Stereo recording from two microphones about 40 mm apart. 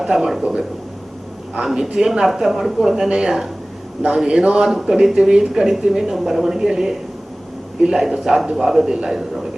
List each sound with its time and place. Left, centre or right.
0.0 s a woman's voice: centre
1.7 s a woman's voice: centre